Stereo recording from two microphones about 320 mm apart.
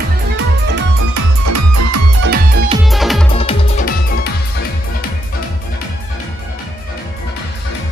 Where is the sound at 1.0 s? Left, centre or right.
Right.